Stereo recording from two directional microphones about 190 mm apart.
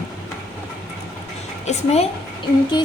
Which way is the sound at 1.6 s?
35° left (ahead or behind).